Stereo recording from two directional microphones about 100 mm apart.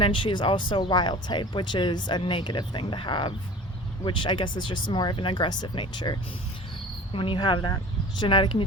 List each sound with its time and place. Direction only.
0.0 s speech: 60° left (ahead or behind)
7.1 s speech: 60° left (ahead or behind)